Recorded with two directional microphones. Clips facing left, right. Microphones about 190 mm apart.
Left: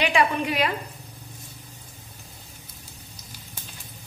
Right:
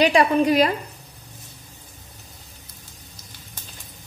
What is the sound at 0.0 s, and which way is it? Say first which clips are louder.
Speech: right 6 dB; 40° right (ahead or behind).